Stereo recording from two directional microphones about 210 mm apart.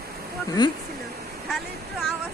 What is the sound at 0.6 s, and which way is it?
Speech, 20° left (ahead or behind).